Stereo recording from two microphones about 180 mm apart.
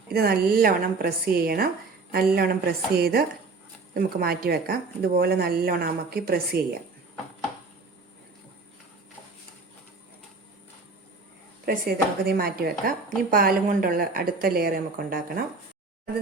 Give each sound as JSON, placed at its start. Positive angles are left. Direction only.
{"t": 0.1, "sound": "speech", "side_deg": -60}
{"t": 11.6, "sound": "speech", "side_deg": -60}